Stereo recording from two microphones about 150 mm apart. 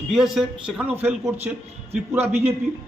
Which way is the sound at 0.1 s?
Centre (ahead or behind).